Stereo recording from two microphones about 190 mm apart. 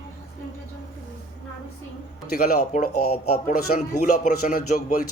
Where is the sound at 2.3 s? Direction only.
50° left (ahead or behind).